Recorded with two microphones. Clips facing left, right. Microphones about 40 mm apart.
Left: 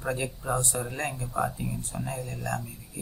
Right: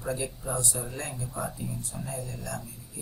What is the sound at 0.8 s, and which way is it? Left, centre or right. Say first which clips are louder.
Speech: left 4 dB; left.